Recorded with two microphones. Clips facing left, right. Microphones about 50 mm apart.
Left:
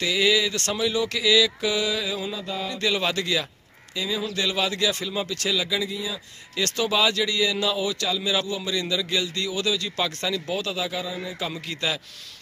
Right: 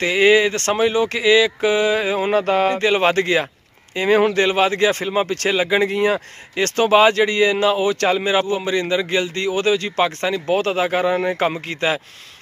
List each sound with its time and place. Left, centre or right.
0.0 s speech: right
2.3 s speech: right
2.7 s speech: right
3.9 s speech: right
4.3 s speech: right
6.5 s speech: right
11.5 s speech: right